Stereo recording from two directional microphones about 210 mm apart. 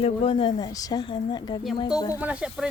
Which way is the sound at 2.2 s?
5° right (ahead or behind).